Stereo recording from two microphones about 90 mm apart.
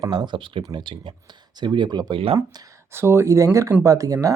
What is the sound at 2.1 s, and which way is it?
Speech, 90° right.